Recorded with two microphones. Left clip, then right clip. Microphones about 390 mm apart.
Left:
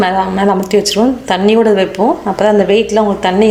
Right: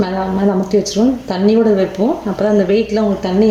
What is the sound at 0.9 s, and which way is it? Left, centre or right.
Speech, left.